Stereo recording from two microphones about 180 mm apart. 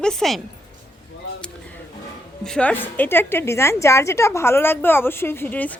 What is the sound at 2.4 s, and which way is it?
Speech, 5° left (ahead or behind).